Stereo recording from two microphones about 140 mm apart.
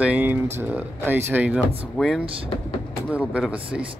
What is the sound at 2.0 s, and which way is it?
Speech, centre (ahead or behind).